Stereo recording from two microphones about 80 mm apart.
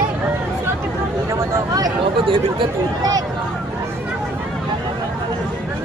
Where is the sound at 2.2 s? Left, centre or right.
Right.